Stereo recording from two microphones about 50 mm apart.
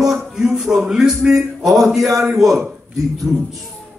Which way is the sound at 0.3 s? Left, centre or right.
Centre.